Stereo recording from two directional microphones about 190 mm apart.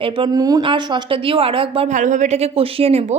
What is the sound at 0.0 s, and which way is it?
Speech, 25° right (ahead or behind).